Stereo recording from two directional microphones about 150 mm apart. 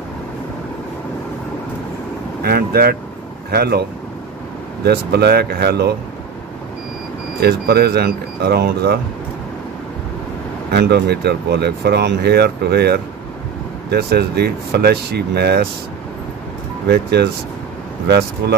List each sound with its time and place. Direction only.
2.4 s speech: 90° right
4.8 s speech: 90° right
7.4 s speech: 90° right
10.7 s speech: 90° right
16.8 s speech: 90° right